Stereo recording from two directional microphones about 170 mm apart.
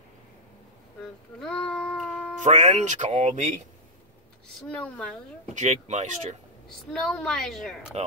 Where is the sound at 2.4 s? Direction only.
45° right (ahead or behind).